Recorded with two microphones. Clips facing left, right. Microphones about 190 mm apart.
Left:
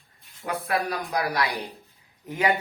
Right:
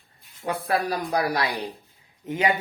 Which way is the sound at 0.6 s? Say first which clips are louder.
Right 2 dB; 30° right (ahead or behind).